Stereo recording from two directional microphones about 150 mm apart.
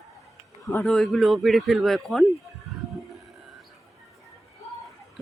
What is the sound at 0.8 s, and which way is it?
Speech, centre (ahead or behind).